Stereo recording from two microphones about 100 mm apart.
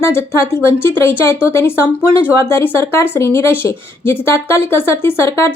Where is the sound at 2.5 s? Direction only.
25° left (ahead or behind).